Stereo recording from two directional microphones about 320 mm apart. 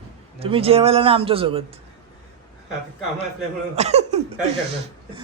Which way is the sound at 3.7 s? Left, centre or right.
Centre.